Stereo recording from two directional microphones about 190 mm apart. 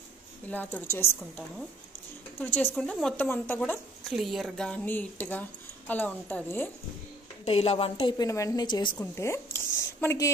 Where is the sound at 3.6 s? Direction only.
Centre (ahead or behind).